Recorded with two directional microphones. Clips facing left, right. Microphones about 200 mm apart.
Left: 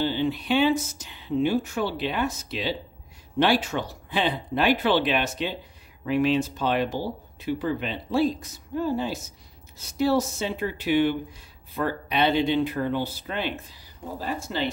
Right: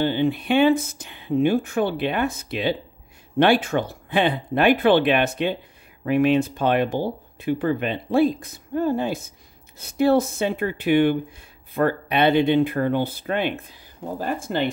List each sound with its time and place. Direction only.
0.0 s speech: 55° right (ahead or behind)